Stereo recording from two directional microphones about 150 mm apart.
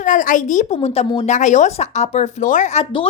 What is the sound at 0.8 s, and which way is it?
Speech, 45° left (ahead or behind).